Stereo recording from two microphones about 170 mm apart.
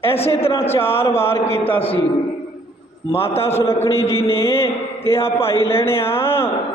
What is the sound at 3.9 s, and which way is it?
A man's voice, 15° left (ahead or behind).